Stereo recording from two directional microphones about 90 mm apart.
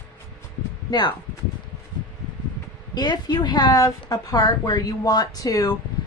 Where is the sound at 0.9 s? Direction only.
55° left (ahead or behind).